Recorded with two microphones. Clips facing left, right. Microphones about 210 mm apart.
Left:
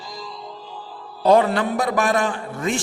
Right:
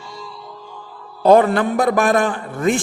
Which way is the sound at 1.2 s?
50° right (ahead or behind).